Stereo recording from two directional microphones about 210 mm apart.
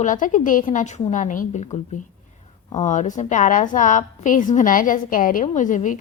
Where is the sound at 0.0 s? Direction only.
40° left (ahead or behind).